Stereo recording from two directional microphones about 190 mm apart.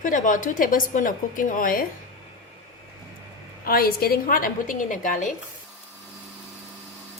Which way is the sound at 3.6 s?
50° left (ahead or behind).